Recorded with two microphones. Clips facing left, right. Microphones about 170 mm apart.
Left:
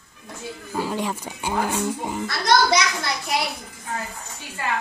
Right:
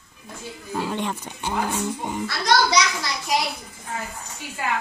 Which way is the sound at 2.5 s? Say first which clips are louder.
Left 1 dB; 55° left (ahead or behind).